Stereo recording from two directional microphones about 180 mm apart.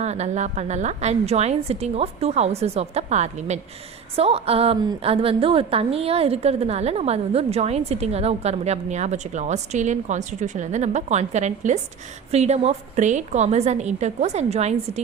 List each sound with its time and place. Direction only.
0.0 s a woman's voice: 40° right (ahead or behind)